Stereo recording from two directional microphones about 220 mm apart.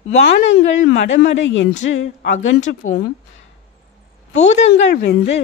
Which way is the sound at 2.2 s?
35° left (ahead or behind).